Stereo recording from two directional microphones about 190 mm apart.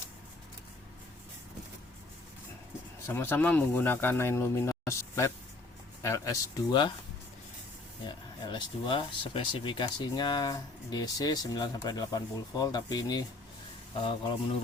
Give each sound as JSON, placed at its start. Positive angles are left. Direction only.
{"t": 3.1, "sound": "speech", "side_deg": 10}
{"t": 8.0, "sound": "speech", "side_deg": 25}